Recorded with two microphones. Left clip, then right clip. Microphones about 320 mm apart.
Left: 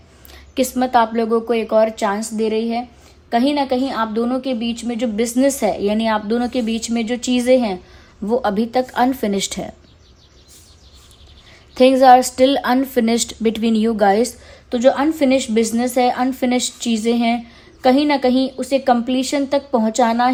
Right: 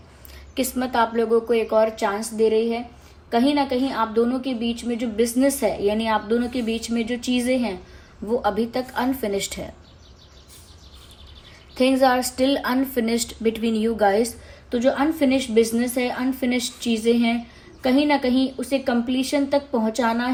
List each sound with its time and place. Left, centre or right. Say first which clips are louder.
0.5 s a woman's voice: left 7 dB; left
11.7 s a woman's voice: left 9 dB; left